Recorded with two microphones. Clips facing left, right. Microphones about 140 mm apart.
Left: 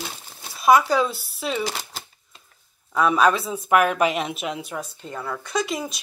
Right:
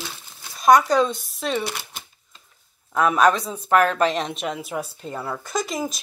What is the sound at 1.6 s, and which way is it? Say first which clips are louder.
Speech: left 1 dB; 35° left (ahead or behind).